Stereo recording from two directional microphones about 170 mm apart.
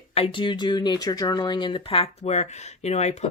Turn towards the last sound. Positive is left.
turn(degrees=40)  # may be behind; listen again after turning